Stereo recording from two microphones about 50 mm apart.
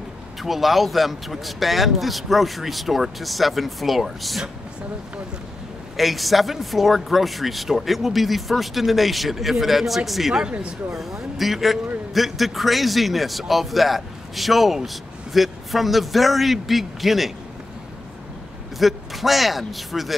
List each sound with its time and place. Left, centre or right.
0.4 s speech: centre
5.9 s speech: centre
10.4 s speech: centre
10.9 s speech: centre
18.8 s speech: centre